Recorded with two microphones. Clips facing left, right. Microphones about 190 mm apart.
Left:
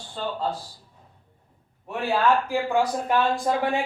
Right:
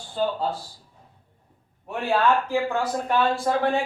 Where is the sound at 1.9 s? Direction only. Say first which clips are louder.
Even; centre (ahead or behind).